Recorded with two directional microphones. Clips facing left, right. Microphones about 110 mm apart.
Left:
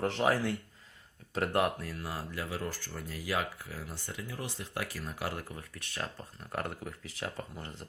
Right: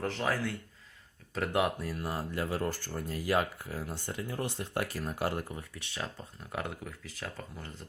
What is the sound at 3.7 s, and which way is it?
Speech, 30° right (ahead or behind).